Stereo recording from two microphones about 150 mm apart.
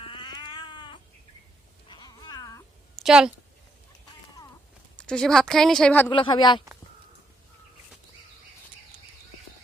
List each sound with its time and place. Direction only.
0.0 s cat: 30° left (ahead or behind)
3.0 s a woman's voice: 5° right (ahead or behind)
4.9 s a woman's voice: 5° left (ahead or behind)
6.1 s speech: 30° left (ahead or behind)